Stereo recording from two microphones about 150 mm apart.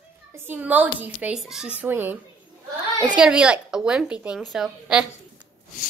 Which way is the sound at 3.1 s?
5° right (ahead or behind).